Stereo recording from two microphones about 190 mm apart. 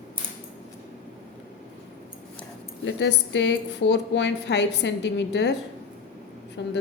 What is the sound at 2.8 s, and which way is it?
A woman's voice, 70° left (ahead or behind).